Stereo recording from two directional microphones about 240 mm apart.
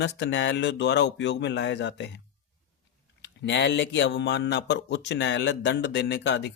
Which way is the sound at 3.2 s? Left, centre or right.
Left.